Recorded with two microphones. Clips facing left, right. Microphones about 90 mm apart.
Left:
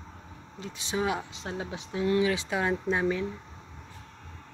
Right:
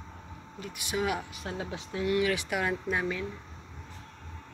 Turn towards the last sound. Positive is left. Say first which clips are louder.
# left 4 dB
turn(degrees=25)  # may be behind; listen again after turning